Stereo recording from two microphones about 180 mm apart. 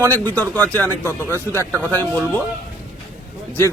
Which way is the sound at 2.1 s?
10° left (ahead or behind).